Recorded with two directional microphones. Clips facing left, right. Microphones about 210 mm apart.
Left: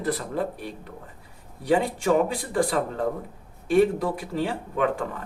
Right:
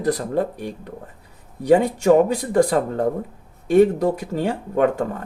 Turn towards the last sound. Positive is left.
turn(degrees=-45)  # may be behind; listen again after turning